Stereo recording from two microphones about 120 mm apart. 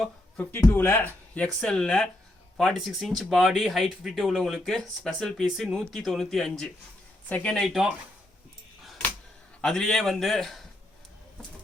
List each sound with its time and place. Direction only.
0.5 s speech: 20° left (ahead or behind)
1.6 s speech: 5° left (ahead or behind)
9.6 s speech: 5° left (ahead or behind)